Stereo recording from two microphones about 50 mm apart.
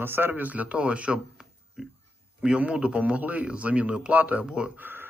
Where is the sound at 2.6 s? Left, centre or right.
Right.